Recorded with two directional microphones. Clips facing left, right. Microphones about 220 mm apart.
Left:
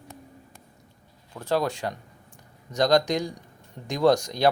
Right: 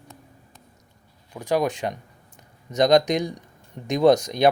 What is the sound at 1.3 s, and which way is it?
Speech, 15° right (ahead or behind).